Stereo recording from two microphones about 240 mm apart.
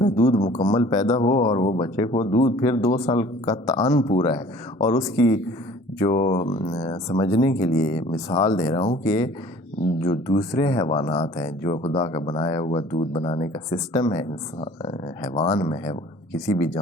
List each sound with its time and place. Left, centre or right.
0.0 s speech: left
0.6 s speech: centre